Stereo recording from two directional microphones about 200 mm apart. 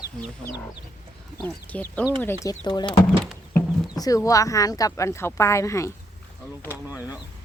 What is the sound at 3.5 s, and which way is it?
Speech, 20° left (ahead or behind).